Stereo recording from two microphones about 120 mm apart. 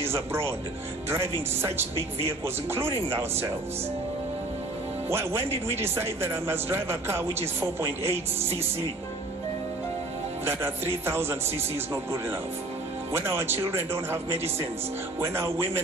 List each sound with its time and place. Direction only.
0.0 s a man's voice: 20° right (ahead or behind)
5.1 s a man's voice: 20° right (ahead or behind)
10.4 s a man's voice: 20° right (ahead or behind)